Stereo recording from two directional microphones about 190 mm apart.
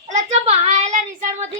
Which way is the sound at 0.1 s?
35° right (ahead or behind).